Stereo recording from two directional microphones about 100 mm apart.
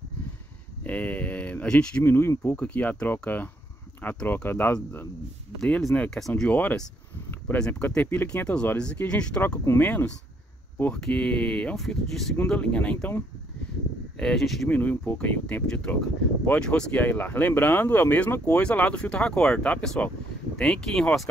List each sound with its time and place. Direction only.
0.8 s a sound: 15° left (ahead or behind)
2.0 s speech: 25° left (ahead or behind)
5.6 s speech: 5° left (ahead or behind)
6.5 s speech: 15° left (ahead or behind)
14.1 s speech: 5° left (ahead or behind)
14.7 s speech: 15° left (ahead or behind)